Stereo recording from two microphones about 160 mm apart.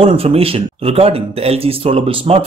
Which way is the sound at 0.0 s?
40° right (ahead or behind).